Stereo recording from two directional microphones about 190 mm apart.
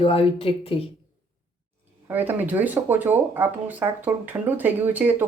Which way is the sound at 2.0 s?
10° right (ahead or behind).